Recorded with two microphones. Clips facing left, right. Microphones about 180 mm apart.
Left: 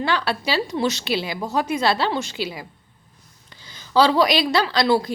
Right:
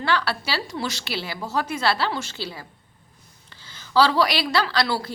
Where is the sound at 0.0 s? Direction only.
15° left (ahead or behind).